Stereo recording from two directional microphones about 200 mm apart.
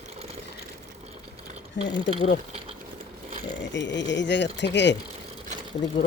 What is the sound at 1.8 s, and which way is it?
Speech, 65° left (ahead or behind).